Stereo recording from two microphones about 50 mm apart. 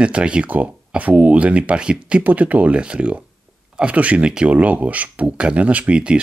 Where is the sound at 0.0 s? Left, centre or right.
Right.